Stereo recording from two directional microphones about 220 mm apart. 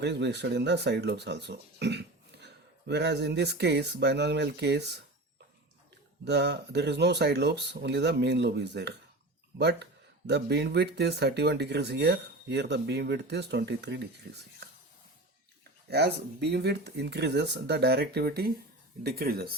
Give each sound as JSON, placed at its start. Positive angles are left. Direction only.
{"t": 0.0, "sound": "speech", "side_deg": -50}
{"t": 6.2, "sound": "speech", "side_deg": -50}
{"t": 10.2, "sound": "speech", "side_deg": -50}
{"t": 15.9, "sound": "speech", "side_deg": -45}